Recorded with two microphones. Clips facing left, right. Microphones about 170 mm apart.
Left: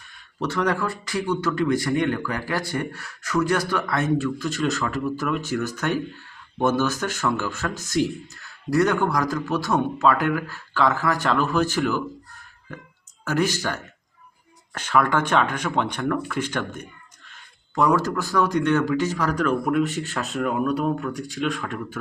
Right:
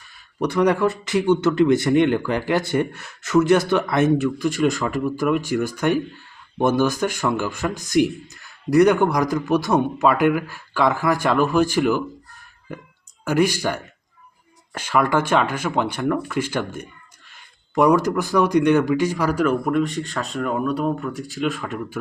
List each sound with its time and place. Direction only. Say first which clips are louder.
0.1 s speech: right 4 dB; 10° right (ahead or behind)
13.2 s speech: right 4 dB; 10° right (ahead or behind)